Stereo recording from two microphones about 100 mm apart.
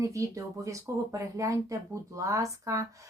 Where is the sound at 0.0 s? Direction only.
30° right (ahead or behind).